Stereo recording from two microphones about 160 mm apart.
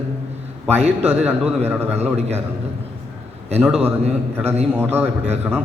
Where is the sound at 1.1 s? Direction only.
10° right (ahead or behind).